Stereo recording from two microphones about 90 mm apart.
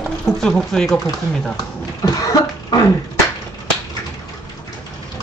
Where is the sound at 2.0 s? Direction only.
40° left (ahead or behind).